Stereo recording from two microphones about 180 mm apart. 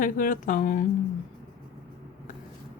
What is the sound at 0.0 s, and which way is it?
Speech, 50° left (ahead or behind).